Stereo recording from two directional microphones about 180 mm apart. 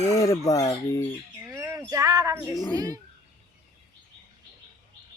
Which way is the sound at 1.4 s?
20° right (ahead or behind).